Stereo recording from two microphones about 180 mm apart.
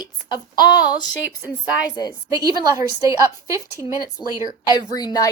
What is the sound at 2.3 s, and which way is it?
A woman's voice, 20° right (ahead or behind).